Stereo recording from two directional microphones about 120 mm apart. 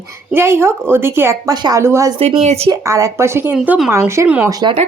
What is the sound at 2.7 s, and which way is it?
A woman's voice, 25° right (ahead or behind).